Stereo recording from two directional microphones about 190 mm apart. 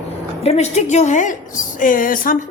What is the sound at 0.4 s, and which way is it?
A woman's voice, 35° left (ahead or behind).